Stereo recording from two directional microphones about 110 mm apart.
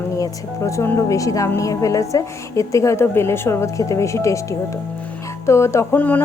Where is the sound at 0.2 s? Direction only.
30° left (ahead or behind).